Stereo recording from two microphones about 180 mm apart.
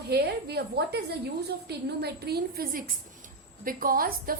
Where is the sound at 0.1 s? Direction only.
65° right (ahead or behind).